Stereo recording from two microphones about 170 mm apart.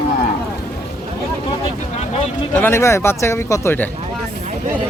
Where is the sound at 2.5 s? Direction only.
15° left (ahead or behind).